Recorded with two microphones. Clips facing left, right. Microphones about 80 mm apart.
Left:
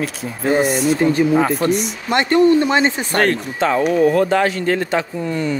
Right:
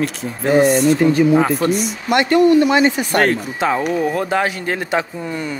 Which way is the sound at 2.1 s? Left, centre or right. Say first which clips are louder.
Right 1 dB; left.